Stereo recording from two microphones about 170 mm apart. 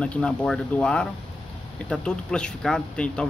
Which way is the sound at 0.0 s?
5° left (ahead or behind).